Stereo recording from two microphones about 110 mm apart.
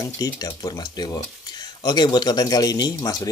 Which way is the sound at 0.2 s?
35° left (ahead or behind).